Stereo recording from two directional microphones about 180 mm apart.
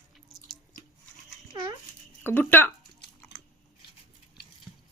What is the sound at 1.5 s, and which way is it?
Dog, 20° right (ahead or behind).